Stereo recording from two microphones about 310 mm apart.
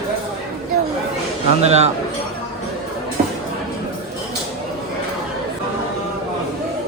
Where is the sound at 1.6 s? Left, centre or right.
Centre.